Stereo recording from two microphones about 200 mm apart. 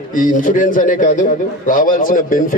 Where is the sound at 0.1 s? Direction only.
40° left (ahead or behind).